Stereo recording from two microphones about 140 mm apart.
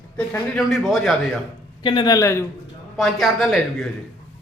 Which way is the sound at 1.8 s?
35° left (ahead or behind).